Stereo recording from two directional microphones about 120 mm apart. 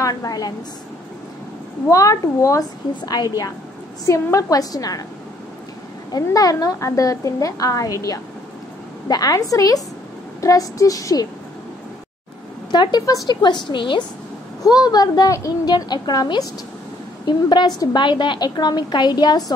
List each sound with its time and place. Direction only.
0.0 s a woman's voice: 30° left (ahead or behind)
1.9 s a woman's voice: 25° left (ahead or behind)
6.1 s a woman's voice: 30° left (ahead or behind)
12.7 s a woman's voice: 35° left (ahead or behind)
17.5 s a woman's voice: 35° left (ahead or behind)